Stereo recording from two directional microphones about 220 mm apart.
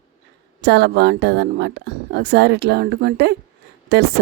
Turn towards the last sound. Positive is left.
turn(degrees=-50)  # may be behind; listen again after turning